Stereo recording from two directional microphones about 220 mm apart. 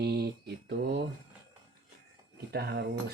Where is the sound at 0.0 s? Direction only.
45° right (ahead or behind).